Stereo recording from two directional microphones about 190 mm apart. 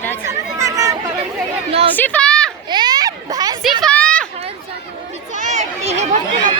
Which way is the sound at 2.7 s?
20° right (ahead or behind).